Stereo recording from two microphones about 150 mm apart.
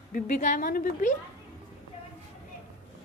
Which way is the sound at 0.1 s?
60° left (ahead or behind).